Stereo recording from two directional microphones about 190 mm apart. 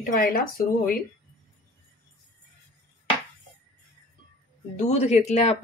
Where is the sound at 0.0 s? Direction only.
45° left (ahead or behind).